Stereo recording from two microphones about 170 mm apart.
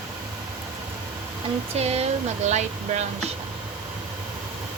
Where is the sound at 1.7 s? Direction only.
40° right (ahead or behind).